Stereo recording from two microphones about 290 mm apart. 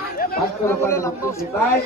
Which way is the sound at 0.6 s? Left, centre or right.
Centre.